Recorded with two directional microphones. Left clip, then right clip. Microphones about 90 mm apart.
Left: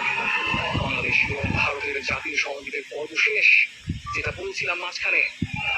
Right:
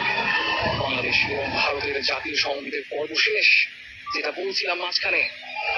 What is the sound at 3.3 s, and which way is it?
Owl, 20° right (ahead or behind).